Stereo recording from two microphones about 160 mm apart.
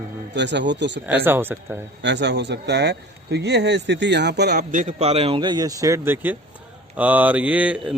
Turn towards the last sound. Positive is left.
turn(degrees=-10)  # may be behind; listen again after turning